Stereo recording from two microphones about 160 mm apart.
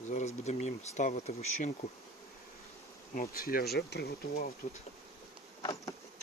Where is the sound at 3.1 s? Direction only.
60° left (ahead or behind).